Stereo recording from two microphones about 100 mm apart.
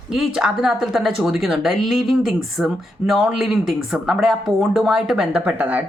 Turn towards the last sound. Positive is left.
turn(degrees=-15)  # may be behind; listen again after turning